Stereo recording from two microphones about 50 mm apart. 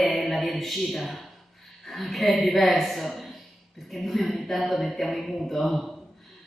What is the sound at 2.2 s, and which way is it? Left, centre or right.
Speech, left.